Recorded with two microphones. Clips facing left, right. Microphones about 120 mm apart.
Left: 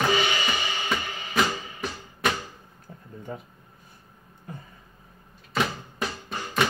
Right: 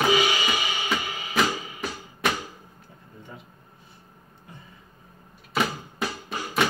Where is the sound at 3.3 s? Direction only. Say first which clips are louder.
Left 8 dB; 40° left (ahead or behind).